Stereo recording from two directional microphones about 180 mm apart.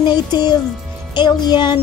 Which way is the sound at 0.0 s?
25° left (ahead or behind).